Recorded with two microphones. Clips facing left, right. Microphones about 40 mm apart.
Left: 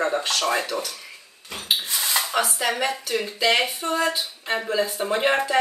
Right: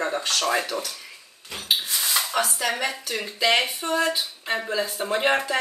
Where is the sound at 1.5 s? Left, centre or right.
Centre.